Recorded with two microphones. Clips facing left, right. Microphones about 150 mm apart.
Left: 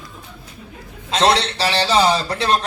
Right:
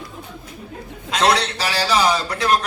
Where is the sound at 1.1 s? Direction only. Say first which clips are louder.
Left 1 dB; 30° left (ahead or behind).